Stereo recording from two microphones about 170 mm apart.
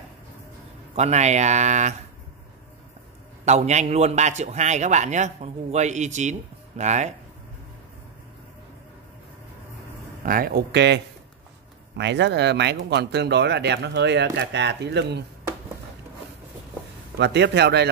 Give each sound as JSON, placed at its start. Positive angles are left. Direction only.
{"t": 0.9, "sound": "a man's voice", "side_deg": -40}
{"t": 3.4, "sound": "a man's voice", "side_deg": -40}
{"t": 10.2, "sound": "speech", "side_deg": -55}
{"t": 12.0, "sound": "speech", "side_deg": -90}
{"t": 17.2, "sound": "speech", "side_deg": -85}